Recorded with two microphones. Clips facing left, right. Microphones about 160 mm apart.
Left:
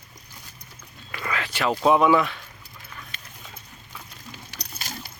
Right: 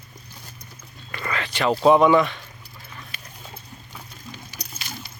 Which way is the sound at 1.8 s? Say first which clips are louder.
Right 3 dB; 5° left (ahead or behind).